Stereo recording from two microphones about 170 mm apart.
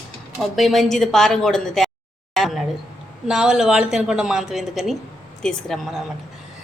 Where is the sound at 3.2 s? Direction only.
5° right (ahead or behind).